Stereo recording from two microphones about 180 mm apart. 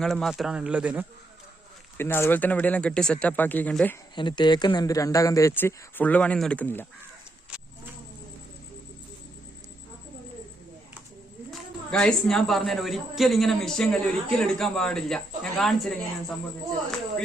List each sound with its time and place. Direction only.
0.0 s a man's voice: centre (ahead or behind)
2.0 s speech: 15° left (ahead or behind)
4.1 s speech: 25° left (ahead or behind); by 6.8 s 10° left (ahead or behind)
11.5 s a man's voice: 5° left (ahead or behind)